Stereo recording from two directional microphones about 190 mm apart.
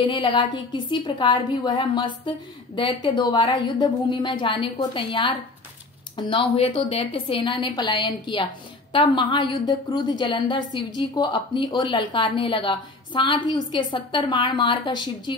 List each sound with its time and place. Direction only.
0.0 s a woman's voice: 25° left (ahead or behind)